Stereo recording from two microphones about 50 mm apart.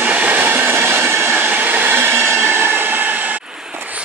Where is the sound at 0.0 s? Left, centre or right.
Right.